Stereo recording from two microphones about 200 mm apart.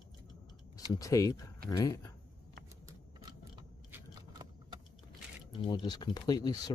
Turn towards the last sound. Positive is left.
turn(degrees=20)  # may be behind; listen again after turning